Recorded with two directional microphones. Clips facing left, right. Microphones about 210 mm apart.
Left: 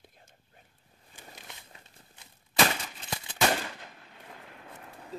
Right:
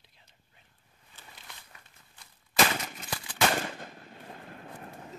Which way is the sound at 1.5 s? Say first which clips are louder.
Left 2 dB; 20° left (ahead or behind).